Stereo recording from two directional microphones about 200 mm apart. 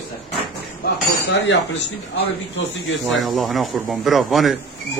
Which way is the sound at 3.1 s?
Centre (ahead or behind).